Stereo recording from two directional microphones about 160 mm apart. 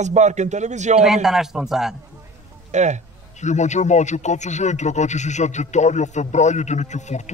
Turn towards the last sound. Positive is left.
turn(degrees=45)  # may be behind; listen again after turning